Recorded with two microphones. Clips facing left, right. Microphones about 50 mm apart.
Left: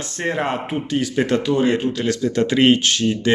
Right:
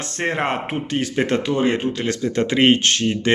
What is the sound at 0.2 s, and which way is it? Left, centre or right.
A man's voice, right.